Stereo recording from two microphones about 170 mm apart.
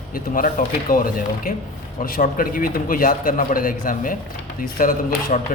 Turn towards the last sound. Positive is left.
turn(degrees=55)  # may be behind; listen again after turning